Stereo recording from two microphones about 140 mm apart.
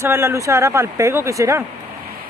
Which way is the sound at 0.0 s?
20° right (ahead or behind).